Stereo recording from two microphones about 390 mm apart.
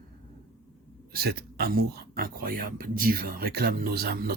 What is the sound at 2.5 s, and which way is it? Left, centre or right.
Speech, right.